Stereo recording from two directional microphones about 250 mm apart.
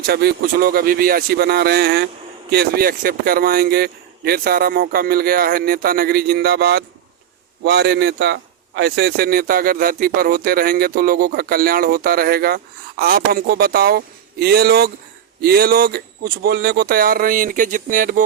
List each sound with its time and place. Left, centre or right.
0.1 s a man's voice: right